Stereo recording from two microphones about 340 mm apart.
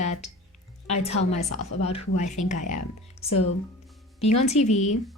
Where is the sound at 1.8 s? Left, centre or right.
Centre.